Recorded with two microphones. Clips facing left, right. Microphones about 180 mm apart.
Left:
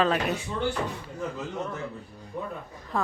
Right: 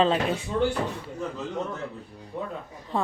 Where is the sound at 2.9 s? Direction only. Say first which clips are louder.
Right 1 dB; 30° right (ahead or behind).